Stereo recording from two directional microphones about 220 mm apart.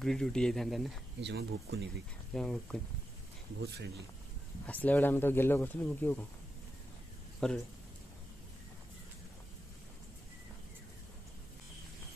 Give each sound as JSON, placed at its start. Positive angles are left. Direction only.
{"t": 0.0, "sound": "speech", "side_deg": 0}
{"t": 1.2, "sound": "speech", "side_deg": -50}
{"t": 2.3, "sound": "speech", "side_deg": 5}
{"t": 3.6, "sound": "speech", "side_deg": -50}
{"t": 4.6, "sound": "speech", "side_deg": 5}
{"t": 7.3, "sound": "speech", "side_deg": 0}